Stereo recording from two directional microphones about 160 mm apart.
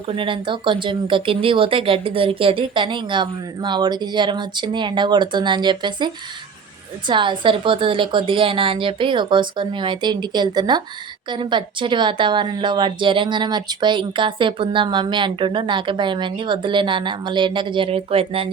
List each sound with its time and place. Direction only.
0.1 s a woman's voice: 30° right (ahead or behind)
7.1 s a woman's voice: 30° right (ahead or behind)